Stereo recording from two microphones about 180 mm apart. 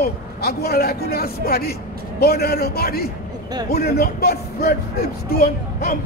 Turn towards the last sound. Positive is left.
turn(degrees=55)  # may be behind; listen again after turning